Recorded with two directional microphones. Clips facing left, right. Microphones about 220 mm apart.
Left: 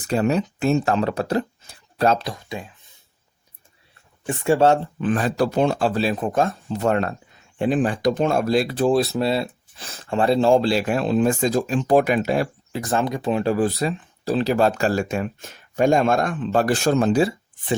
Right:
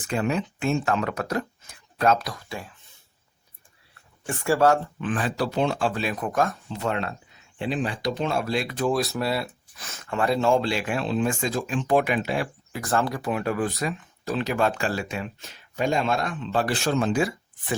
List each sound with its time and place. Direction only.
0.1 s speech: 40° left (ahead or behind); by 2.7 s 20° left (ahead or behind)
4.3 s speech: 25° left (ahead or behind)
6.7 s speech: 45° left (ahead or behind)
12.8 s speech: 15° left (ahead or behind)